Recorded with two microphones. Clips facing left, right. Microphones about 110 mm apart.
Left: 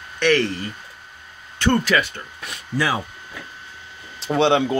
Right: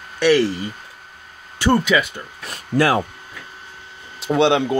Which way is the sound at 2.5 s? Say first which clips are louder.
Right 6 dB; 55° right (ahead or behind).